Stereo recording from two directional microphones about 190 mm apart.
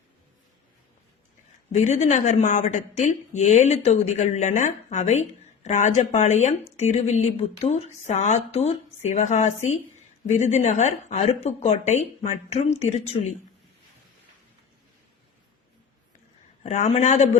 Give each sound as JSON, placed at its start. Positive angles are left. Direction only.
{"t": 1.7, "sound": "a woman's voice", "side_deg": 40}
{"t": 16.6, "sound": "a woman's voice", "side_deg": 35}